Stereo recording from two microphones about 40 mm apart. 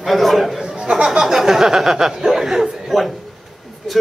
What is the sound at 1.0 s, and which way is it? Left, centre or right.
Speech, centre.